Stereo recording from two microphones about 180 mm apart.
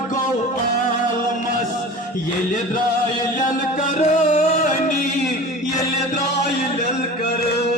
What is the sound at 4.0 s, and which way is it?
Music, 40° left (ahead or behind).